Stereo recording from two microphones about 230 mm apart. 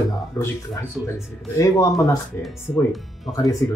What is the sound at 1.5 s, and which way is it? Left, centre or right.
Speech, centre.